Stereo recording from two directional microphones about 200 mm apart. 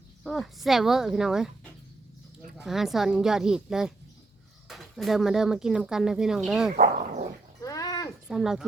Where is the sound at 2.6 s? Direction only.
Centre (ahead or behind).